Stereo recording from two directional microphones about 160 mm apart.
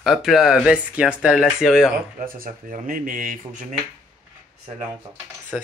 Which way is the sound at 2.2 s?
60° right (ahead or behind).